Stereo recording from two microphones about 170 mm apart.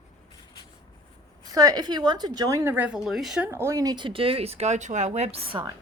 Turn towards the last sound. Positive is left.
turn(degrees=-40)  # may be behind; listen again after turning